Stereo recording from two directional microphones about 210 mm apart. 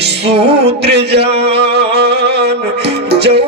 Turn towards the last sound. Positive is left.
turn(degrees=-50)  # may be behind; listen again after turning